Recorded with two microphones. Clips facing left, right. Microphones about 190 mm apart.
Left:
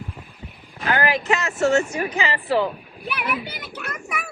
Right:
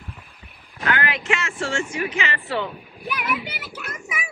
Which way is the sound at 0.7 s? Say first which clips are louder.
Left 3 dB; 30° left (ahead or behind).